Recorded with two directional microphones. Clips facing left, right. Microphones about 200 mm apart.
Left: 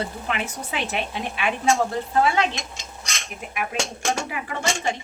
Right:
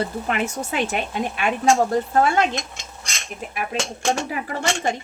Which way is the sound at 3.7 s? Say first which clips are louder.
Right 3 dB; 35° right (ahead or behind).